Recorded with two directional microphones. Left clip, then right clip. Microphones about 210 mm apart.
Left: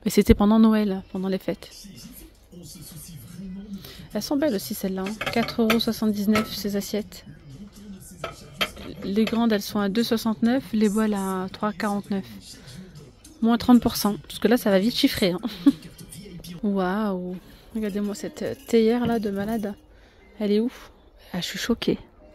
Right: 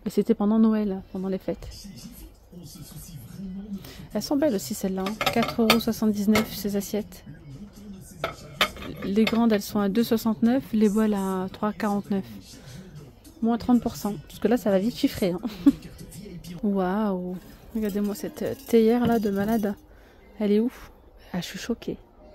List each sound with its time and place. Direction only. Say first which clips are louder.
0.0 s speech: left 5 dB; 15° left (ahead or behind)
3.8 s a woman's voice: left 1 dB; centre (ahead or behind)
8.5 s cutlery: right 3 dB; 30° right (ahead or behind)
9.1 s speech: even; centre (ahead or behind)
13.4 s speech: left 4 dB; 15° left (ahead or behind)